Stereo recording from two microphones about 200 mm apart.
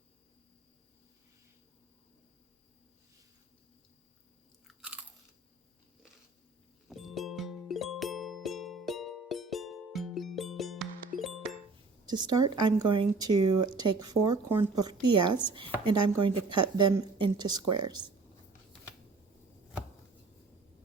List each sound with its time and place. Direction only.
4.7 s crunch: 5° right (ahead or behind)
6.8 s music: centre (ahead or behind)
12.0 s speech: 20° right (ahead or behind)